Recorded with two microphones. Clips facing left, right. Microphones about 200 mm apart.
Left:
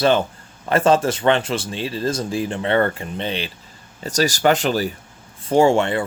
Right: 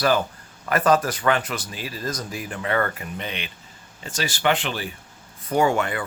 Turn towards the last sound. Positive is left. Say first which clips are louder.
# left 6 dB
turn(degrees=30)  # may be behind; listen again after turning